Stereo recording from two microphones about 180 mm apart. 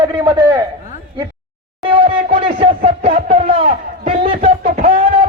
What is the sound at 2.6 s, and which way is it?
A man's voice, 30° right (ahead or behind).